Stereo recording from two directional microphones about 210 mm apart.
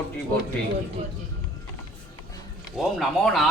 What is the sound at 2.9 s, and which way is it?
Speech, centre (ahead or behind).